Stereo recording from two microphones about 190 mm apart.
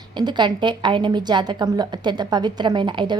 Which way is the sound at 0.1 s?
25° right (ahead or behind).